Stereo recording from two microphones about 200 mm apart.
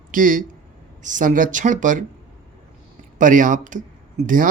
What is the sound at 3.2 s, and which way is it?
Speech, 40° right (ahead or behind).